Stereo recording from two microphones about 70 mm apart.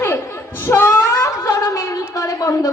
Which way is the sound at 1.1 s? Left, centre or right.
Left.